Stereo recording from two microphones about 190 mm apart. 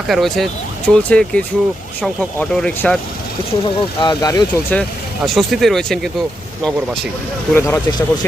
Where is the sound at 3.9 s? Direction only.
20° left (ahead or behind).